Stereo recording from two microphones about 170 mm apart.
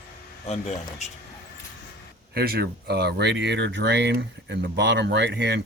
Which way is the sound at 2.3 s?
65° right (ahead or behind).